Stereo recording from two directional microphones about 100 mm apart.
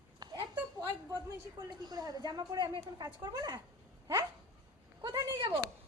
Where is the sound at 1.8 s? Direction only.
40° right (ahead or behind).